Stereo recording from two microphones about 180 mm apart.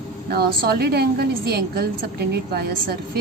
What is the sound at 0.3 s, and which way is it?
A woman's voice, 60° right (ahead or behind).